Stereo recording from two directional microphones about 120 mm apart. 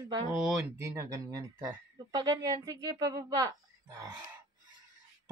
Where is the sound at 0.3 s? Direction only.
15° right (ahead or behind); by 3.5 s 35° right (ahead or behind).